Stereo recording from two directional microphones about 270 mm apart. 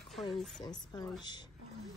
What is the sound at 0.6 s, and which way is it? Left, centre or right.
Speech, centre.